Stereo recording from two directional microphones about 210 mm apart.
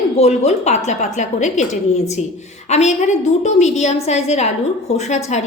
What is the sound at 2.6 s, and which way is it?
A woman's voice, 30° left (ahead or behind).